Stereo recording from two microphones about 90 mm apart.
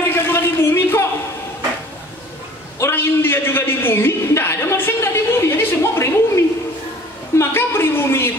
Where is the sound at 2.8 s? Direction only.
25° left (ahead or behind).